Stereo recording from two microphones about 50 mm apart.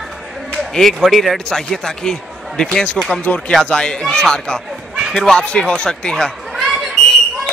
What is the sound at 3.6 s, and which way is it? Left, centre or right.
Speech, centre.